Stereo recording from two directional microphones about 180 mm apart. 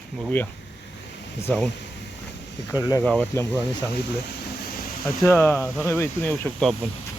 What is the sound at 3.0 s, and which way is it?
Speech, 10° left (ahead or behind).